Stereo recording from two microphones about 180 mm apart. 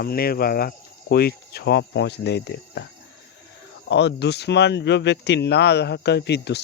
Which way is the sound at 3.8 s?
70° left (ahead or behind).